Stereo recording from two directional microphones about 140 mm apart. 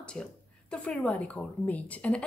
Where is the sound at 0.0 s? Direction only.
5° left (ahead or behind).